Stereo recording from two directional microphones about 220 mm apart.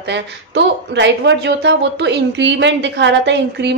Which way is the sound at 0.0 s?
50° right (ahead or behind).